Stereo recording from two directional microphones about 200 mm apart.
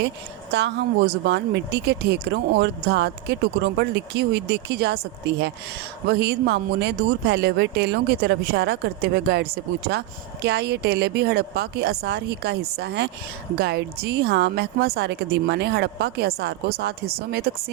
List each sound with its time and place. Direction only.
0.5 s speech: 55° right (ahead or behind)